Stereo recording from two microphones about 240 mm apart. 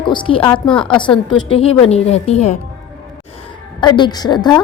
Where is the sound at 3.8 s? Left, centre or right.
Centre.